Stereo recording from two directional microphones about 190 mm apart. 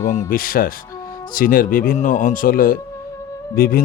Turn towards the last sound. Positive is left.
turn(degrees=50)  # may be behind; listen again after turning